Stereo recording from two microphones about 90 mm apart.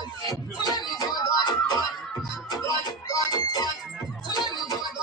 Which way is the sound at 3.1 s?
50° left (ahead or behind).